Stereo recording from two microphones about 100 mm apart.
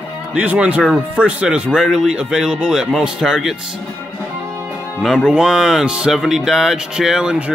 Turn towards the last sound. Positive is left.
turn(degrees=-5)  # may be behind; listen again after turning